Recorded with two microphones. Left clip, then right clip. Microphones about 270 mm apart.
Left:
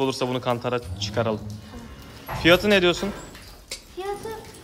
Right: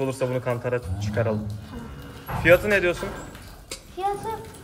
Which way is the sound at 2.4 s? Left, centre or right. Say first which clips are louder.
Even; left.